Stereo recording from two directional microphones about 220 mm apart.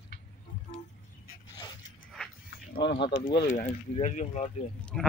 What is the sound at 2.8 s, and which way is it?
Speech, 50° left (ahead or behind).